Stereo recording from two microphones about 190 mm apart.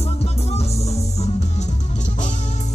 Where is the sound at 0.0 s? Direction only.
35° left (ahead or behind).